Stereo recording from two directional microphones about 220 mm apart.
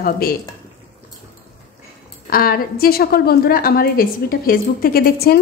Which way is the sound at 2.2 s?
40° left (ahead or behind).